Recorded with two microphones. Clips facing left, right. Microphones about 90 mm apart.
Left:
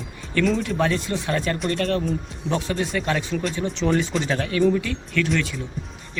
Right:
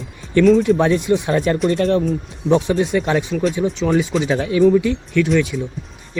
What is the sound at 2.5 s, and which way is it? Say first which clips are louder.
Speech: right 9 dB; 20° right (ahead or behind).